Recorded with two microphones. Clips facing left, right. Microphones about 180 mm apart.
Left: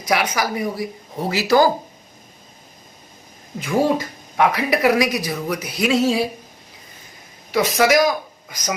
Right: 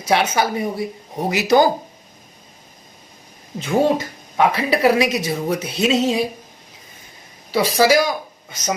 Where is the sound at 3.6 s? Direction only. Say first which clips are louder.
Right 1 dB; 25° right (ahead or behind).